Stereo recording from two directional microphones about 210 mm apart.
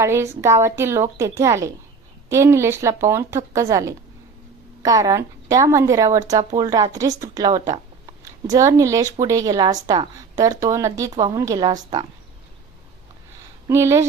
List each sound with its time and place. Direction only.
0.0 s a woman's voice: 15° right (ahead or behind)
13.7 s speech: 15° right (ahead or behind)